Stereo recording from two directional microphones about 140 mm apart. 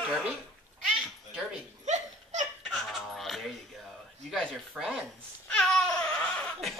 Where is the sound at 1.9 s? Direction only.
60° right (ahead or behind).